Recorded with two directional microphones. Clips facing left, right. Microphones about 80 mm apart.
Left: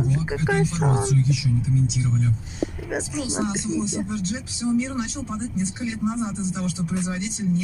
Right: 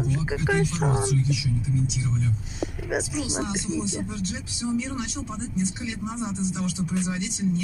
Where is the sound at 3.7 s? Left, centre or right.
Left.